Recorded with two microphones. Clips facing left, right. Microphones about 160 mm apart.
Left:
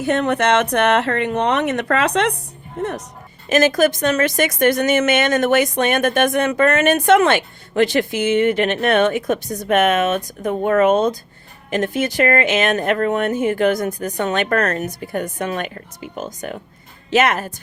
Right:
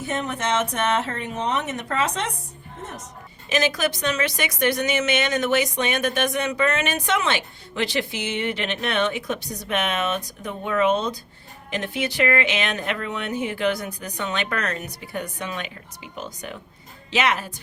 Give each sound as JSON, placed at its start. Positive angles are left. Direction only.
{"t": 0.0, "sound": "speech", "side_deg": 70}
{"t": 3.5, "sound": "a woman's voice", "side_deg": 50}